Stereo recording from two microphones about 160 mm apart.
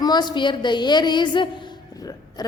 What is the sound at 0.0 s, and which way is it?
A woman's voice, 25° left (ahead or behind).